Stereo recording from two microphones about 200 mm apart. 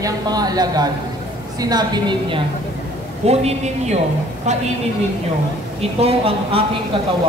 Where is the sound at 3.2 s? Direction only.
30° right (ahead or behind).